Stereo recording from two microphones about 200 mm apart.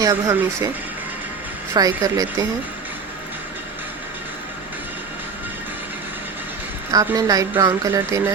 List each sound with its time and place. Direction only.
0.0 s a woman's voice: 15° right (ahead or behind)
1.7 s a woman's voice: 20° right (ahead or behind)
6.9 s a woman's voice: 15° right (ahead or behind)